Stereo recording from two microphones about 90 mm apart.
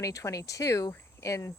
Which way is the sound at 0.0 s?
40° left (ahead or behind).